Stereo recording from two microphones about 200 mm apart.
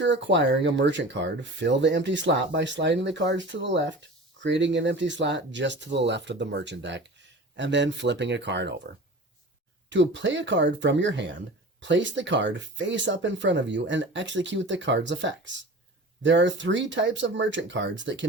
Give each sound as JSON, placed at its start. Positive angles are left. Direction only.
{"t": 0.0, "sound": "speech", "side_deg": -65}